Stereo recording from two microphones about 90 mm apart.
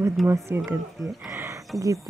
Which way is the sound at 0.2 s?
Centre (ahead or behind).